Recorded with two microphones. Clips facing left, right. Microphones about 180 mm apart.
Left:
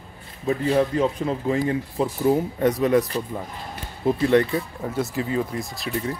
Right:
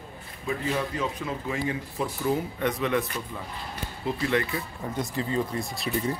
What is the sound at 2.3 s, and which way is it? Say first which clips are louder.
Speech: left 6 dB; 40° left (ahead or behind).